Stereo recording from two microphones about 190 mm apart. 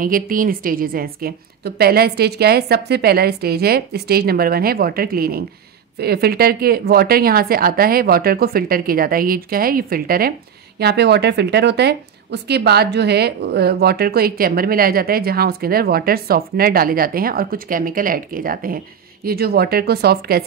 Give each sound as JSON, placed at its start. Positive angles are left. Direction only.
{"t": 0.0, "sound": "a woman's voice", "side_deg": -45}